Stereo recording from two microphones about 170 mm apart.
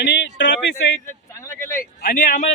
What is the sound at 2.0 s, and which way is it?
Speech, 50° left (ahead or behind).